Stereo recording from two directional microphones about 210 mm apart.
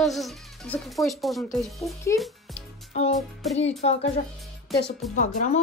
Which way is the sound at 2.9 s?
30° left (ahead or behind).